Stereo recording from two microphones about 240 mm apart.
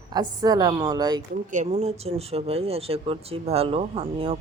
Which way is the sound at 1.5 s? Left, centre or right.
Right.